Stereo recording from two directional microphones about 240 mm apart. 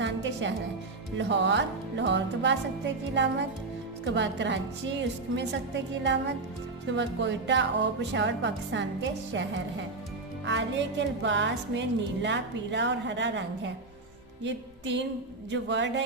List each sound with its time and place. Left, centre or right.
0.0 s music: right
1.2 s speech: right
14.4 s music: right
15.4 s speech: right